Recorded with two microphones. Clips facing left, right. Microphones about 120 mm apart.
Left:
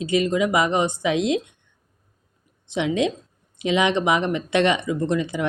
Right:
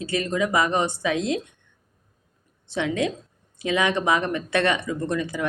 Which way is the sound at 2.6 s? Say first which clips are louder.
Left 3 dB; 20° left (ahead or behind).